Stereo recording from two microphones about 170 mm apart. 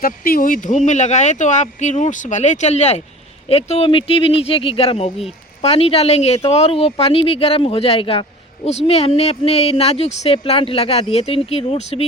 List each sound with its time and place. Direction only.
0.0 s speech: 55° left (ahead or behind); by 12.0 s 35° left (ahead or behind)